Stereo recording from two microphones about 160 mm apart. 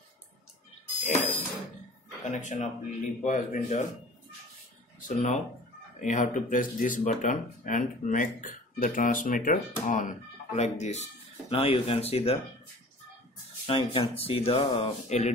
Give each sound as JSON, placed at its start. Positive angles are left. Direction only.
{"t": 1.0, "sound": "a sound", "side_deg": 55}
{"t": 2.2, "sound": "speech", "side_deg": 50}
{"t": 5.0, "sound": "speech", "side_deg": 45}
{"t": 13.7, "sound": "speech", "side_deg": 35}
{"t": 15.0, "sound": "speech", "side_deg": 45}